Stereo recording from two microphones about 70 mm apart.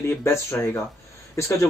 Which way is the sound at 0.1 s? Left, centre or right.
Left.